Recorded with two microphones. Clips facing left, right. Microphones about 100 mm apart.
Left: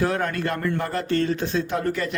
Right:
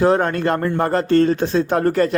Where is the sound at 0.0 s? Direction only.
35° right (ahead or behind).